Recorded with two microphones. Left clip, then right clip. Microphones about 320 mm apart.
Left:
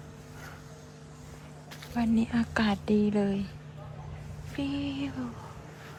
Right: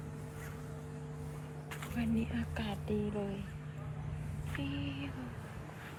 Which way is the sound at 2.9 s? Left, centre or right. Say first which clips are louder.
Left 7 dB; left.